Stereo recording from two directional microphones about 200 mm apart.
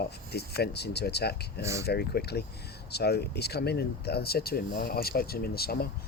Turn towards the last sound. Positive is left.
turn(degrees=50)  # may be behind; listen again after turning